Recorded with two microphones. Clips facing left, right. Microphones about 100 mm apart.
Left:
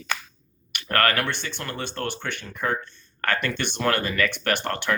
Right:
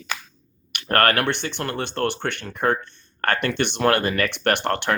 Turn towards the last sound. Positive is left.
turn(degrees=-60)  # may be behind; listen again after turning